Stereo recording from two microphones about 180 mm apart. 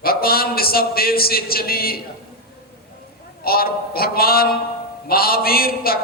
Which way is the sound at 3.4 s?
55° left (ahead or behind).